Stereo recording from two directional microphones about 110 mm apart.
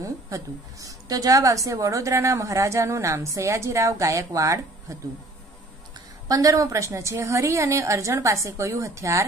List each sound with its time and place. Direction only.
0.0 s a woman's voice: 30° right (ahead or behind)
6.2 s a woman's voice: 30° right (ahead or behind)